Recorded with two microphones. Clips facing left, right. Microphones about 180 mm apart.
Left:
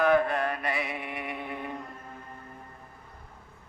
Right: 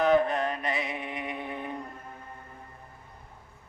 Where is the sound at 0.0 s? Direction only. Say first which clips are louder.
Even; 20° right (ahead or behind).